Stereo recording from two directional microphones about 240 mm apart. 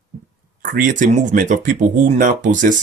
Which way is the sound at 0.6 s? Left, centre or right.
Right.